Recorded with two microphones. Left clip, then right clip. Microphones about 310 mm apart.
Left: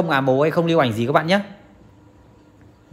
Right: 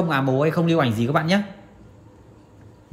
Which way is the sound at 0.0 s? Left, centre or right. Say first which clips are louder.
Left 3 dB; left.